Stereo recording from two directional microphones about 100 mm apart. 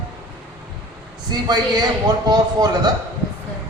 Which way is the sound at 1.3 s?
45° right (ahead or behind).